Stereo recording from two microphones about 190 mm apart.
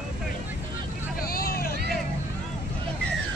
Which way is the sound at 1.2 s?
50° left (ahead or behind).